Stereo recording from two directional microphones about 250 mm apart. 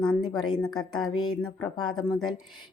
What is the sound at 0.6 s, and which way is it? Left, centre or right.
Speech, centre.